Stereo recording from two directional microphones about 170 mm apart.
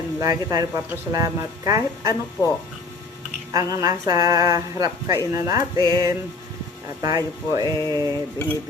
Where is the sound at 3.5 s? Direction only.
20° right (ahead or behind).